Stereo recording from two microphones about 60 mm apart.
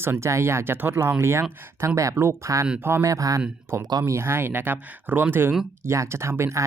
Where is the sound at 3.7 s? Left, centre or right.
Right.